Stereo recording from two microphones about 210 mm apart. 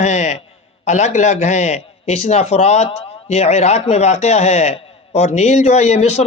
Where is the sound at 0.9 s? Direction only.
35° left (ahead or behind).